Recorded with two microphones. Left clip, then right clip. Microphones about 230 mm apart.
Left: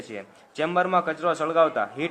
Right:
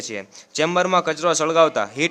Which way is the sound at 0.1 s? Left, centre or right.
Right.